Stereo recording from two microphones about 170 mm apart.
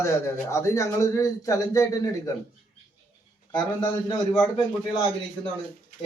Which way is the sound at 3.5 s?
25° left (ahead or behind).